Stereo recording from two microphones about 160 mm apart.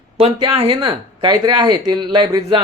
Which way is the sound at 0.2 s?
30° right (ahead or behind).